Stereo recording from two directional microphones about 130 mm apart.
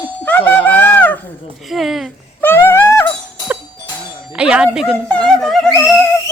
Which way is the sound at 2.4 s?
15° left (ahead or behind).